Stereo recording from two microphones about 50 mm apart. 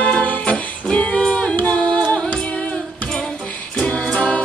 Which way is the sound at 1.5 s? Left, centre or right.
Left.